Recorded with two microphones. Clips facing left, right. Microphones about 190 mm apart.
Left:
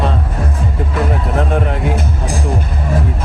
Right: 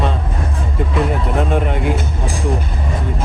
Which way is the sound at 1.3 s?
Centre (ahead or behind).